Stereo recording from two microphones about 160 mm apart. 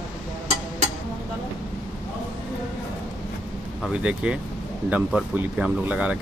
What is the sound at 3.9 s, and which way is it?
Speech, 5° right (ahead or behind).